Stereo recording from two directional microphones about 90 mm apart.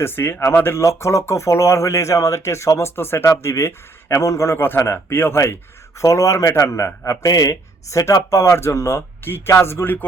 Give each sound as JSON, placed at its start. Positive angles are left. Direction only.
{"t": 0.0, "sound": "speech", "side_deg": 25}